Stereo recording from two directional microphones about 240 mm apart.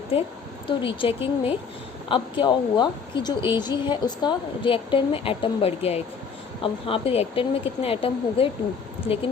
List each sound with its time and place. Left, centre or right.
0.1 s a woman's voice: left